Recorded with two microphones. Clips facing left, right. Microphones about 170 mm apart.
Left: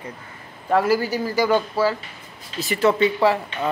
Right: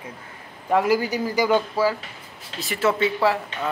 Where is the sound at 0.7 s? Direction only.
15° right (ahead or behind).